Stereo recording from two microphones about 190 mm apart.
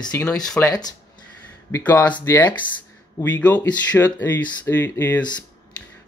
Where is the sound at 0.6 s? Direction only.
20° left (ahead or behind).